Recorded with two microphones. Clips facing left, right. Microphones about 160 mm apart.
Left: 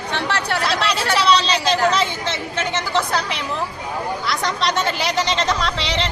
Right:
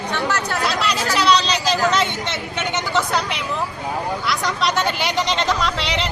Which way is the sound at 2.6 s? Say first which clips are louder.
Even; centre (ahead or behind).